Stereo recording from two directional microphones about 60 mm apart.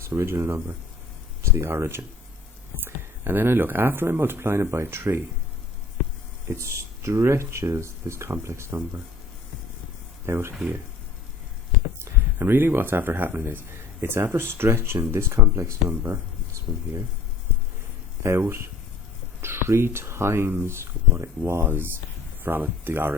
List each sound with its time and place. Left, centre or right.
0.0 s speech: right
6.5 s speech: right
10.2 s speech: right
12.1 s a sound: right
12.4 s speech: right
18.2 s speech: right
21.6 s speech: right